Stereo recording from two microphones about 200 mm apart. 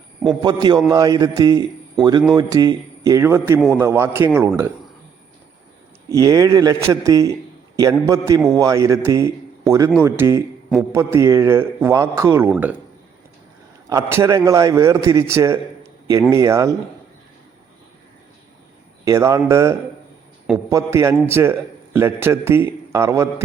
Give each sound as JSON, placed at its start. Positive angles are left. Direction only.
{"t": 0.3, "sound": "a man's voice", "side_deg": -20}
{"t": 6.1, "sound": "a man's voice", "side_deg": -15}
{"t": 13.9, "sound": "a man's voice", "side_deg": -15}
{"t": 19.0, "sound": "a man's voice", "side_deg": -15}